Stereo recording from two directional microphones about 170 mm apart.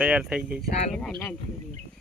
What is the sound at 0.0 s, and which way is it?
Speech, 5° right (ahead or behind).